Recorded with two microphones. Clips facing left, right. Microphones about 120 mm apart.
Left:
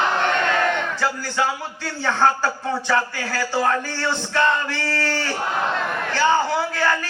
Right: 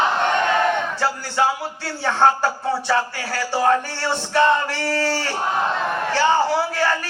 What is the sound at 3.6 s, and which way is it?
Music, 20° right (ahead or behind).